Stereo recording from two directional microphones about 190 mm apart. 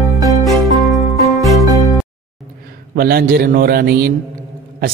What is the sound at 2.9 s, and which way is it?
Speech, 50° right (ahead or behind).